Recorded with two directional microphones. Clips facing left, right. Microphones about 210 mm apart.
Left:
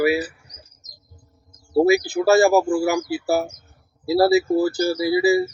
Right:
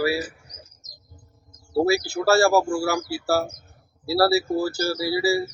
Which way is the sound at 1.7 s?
15° left (ahead or behind).